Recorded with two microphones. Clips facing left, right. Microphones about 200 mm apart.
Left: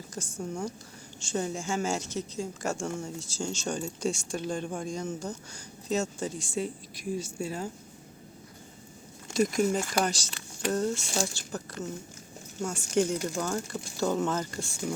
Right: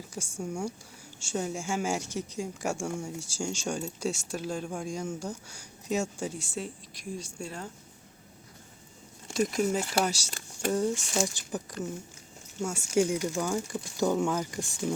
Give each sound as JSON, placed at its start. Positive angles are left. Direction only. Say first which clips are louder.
{"t": 0.1, "sound": "speech", "louder": "even", "side_deg": -10}
{"t": 9.3, "sound": "speech", "louder": "left 2 dB", "side_deg": 0}